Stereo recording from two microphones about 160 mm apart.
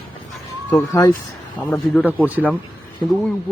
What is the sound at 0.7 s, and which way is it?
Speech, 20° left (ahead or behind).